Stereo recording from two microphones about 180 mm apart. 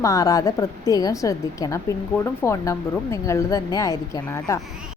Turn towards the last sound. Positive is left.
turn(degrees=20)  # may be behind; listen again after turning